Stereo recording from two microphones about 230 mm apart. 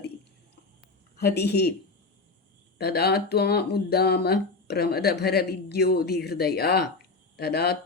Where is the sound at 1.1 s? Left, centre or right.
Left.